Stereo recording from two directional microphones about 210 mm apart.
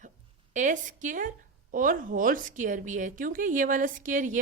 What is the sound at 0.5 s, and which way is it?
A woman's voice, 35° right (ahead or behind).